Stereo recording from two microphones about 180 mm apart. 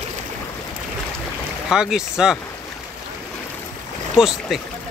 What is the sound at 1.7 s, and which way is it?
Speech, 5° right (ahead or behind).